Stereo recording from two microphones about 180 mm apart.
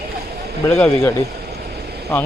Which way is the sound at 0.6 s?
15° left (ahead or behind).